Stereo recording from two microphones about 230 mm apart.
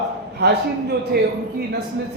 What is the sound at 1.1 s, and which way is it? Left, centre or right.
Speech, right.